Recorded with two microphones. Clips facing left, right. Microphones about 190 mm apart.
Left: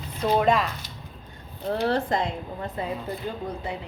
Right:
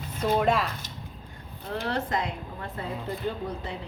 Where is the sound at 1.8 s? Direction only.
30° left (ahead or behind).